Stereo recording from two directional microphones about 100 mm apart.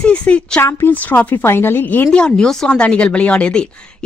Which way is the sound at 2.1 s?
10° left (ahead or behind).